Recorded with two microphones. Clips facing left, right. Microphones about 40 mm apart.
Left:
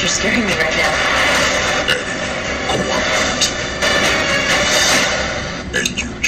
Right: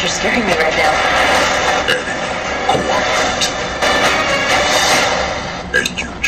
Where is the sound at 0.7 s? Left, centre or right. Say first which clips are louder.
Right 2 dB; right.